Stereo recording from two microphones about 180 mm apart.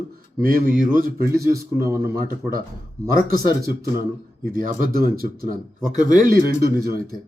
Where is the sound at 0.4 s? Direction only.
50° right (ahead or behind).